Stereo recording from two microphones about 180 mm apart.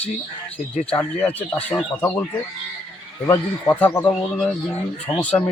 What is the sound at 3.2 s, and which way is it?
Speech, 15° left (ahead or behind).